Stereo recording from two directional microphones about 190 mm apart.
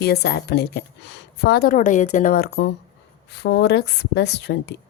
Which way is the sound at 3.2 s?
65° left (ahead or behind).